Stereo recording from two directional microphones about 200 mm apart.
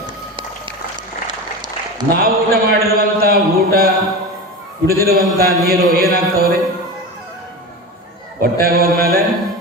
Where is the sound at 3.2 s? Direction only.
50° right (ahead or behind).